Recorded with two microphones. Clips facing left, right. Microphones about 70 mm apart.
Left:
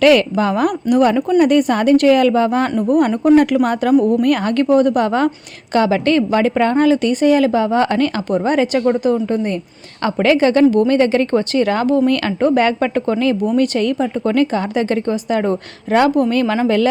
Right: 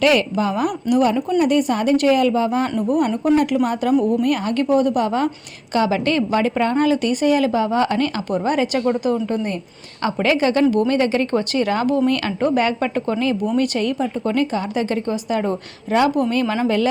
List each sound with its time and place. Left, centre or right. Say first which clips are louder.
0.0 s a woman's voice: left 5 dB; left
3.3 s a woman's voice: left 6 dB; left